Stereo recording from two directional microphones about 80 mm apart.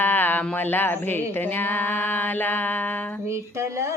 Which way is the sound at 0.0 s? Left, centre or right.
Left.